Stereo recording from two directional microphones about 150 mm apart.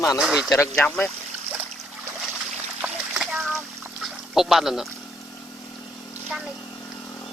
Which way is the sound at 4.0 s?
Centre (ahead or behind).